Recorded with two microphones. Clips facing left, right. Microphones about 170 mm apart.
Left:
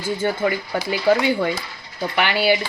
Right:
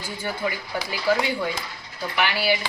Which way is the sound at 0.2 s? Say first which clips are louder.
Left 4 dB; 55° left (ahead or behind).